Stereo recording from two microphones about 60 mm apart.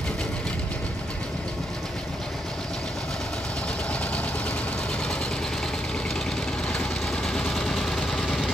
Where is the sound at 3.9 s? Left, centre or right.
Left.